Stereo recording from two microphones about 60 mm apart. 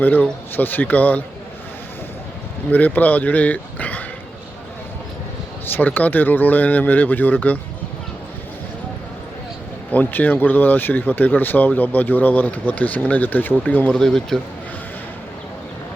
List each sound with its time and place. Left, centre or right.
0.0 s speech: left
2.6 s speech: left
5.7 s speech: left
9.9 s speech: left
13.9 s speech: centre